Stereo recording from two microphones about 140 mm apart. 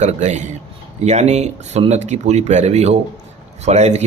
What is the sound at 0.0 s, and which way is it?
Speech, 55° right (ahead or behind).